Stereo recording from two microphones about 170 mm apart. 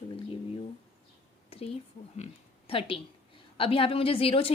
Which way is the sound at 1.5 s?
35° left (ahead or behind).